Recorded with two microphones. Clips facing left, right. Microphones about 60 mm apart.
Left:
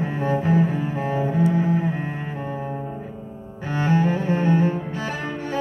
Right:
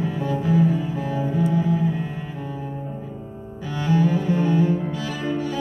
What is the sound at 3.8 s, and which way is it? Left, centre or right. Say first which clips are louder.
Cello: even; left.